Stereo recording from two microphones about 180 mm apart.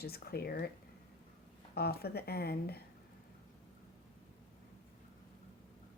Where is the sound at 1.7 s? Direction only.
60° left (ahead or behind).